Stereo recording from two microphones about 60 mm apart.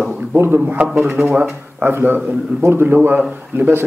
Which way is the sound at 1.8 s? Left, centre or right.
Right.